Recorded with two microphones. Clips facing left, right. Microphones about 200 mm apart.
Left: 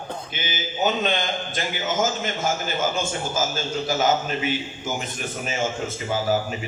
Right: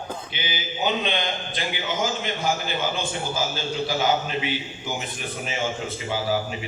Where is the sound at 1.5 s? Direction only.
45° left (ahead or behind).